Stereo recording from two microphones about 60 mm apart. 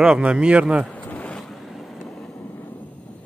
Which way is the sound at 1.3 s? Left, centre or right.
Centre.